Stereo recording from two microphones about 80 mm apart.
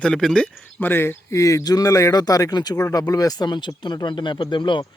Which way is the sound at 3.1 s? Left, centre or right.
Left.